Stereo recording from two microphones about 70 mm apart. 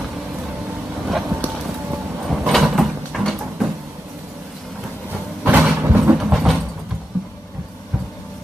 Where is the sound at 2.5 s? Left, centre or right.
Centre.